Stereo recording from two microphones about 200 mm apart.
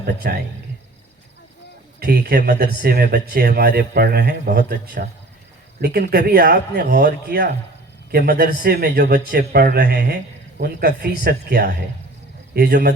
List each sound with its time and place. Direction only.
0.0 s speech: 50° right (ahead or behind)
2.0 s speech: 50° right (ahead or behind)